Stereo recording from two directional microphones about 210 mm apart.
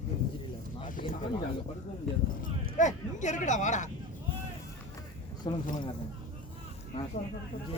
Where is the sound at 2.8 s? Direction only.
35° left (ahead or behind).